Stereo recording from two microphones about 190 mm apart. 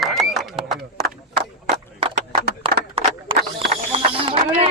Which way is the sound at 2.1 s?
60° right (ahead or behind).